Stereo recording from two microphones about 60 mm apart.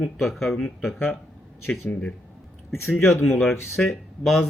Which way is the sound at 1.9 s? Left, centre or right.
Centre.